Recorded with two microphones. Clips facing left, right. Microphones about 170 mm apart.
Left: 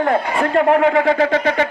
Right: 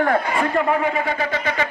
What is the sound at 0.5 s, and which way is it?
Speech, 75° left (ahead or behind).